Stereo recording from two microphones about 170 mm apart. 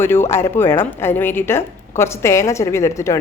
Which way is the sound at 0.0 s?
15° left (ahead or behind).